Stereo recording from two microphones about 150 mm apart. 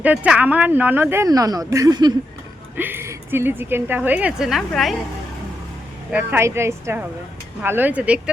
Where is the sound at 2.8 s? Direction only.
15° right (ahead or behind).